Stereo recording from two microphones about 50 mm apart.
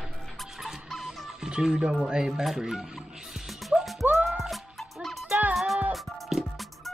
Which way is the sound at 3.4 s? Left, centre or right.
Centre.